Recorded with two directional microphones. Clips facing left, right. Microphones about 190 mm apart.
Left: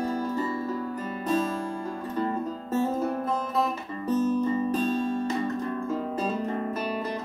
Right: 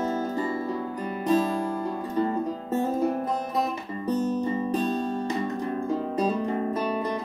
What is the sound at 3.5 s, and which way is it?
Music, 15° right (ahead or behind).